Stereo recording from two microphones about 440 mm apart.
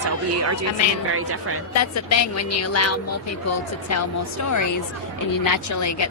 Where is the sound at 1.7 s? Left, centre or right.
Left.